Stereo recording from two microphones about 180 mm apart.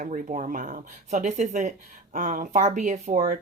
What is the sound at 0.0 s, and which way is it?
Speech, 40° right (ahead or behind).